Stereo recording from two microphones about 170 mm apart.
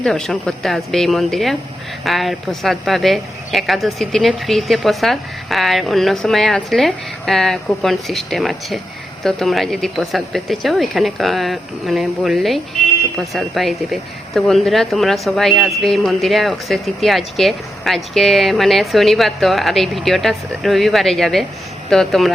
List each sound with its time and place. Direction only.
0.0 s speech: centre (ahead or behind)